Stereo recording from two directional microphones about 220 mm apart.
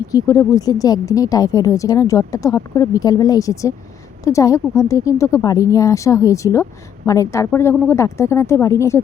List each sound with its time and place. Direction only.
0.1 s a woman's voice: 15° left (ahead or behind)